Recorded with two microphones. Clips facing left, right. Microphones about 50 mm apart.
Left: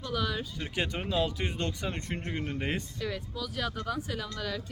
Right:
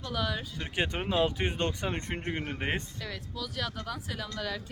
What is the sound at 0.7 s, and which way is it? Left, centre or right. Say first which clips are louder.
Speech: right 2 dB; right.